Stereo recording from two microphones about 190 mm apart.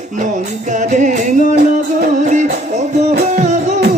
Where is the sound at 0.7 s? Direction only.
40° right (ahead or behind).